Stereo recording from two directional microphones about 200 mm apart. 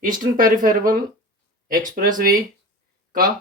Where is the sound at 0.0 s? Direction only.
40° right (ahead or behind).